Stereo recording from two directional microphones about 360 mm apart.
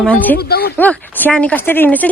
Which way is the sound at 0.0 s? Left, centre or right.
Centre.